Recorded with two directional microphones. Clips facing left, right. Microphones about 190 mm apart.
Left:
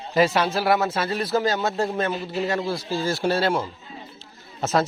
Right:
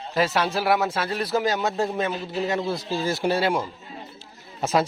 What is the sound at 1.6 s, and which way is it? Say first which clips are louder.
Speech: left 1 dB; centre (ahead or behind).